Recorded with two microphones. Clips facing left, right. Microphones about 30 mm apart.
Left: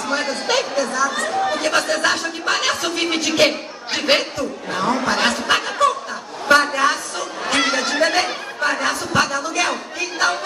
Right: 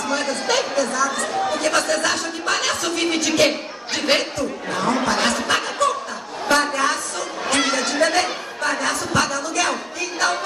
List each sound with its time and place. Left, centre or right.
0.1 s chatter: left
0.5 s speech: centre
5.0 s a sound: centre
8.0 s chatter: centre
8.6 s music: centre